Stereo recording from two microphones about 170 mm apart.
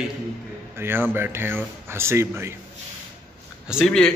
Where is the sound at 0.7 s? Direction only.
15° right (ahead or behind).